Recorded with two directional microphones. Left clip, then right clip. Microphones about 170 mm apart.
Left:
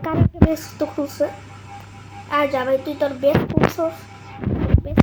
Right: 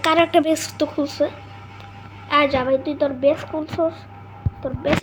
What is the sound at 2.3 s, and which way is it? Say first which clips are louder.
A woman's voice: right 1 dB; 25° right (ahead or behind).